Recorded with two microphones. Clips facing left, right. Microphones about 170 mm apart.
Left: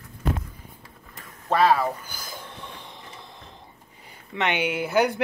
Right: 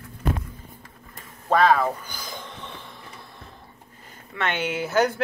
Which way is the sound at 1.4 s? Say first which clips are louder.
Right 1 dB; 5° left (ahead or behind).